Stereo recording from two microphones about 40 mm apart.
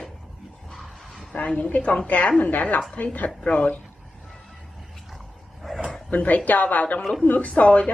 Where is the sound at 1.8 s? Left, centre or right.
Left.